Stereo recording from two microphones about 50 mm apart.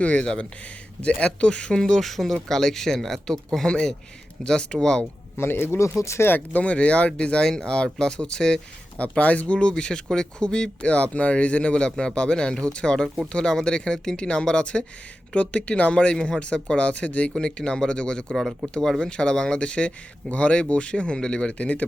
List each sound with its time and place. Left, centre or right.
0.0 s speech: left
2.0 s speech: centre
5.4 s speech: left
6.0 s speech: left
6.2 s speech: left
6.6 s speech: left
9.0 s speech: left
16.1 s speech: centre
16.4 s speech: left